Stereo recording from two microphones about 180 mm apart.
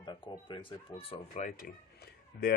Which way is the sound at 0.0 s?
25° left (ahead or behind).